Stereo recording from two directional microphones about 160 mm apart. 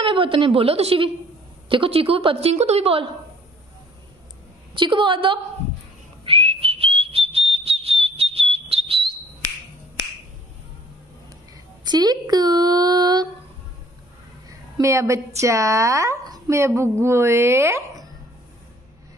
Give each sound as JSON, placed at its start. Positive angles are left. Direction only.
{"t": 0.0, "sound": "a woman's voice", "side_deg": -35}
{"t": 4.7, "sound": "a woman's voice", "side_deg": -30}
{"t": 6.2, "sound": "whistle", "side_deg": -35}
{"t": 11.8, "sound": "speech", "side_deg": -25}
{"t": 14.5, "sound": "a woman's voice", "side_deg": -20}